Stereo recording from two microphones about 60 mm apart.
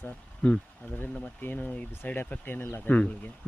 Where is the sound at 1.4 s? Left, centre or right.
Left.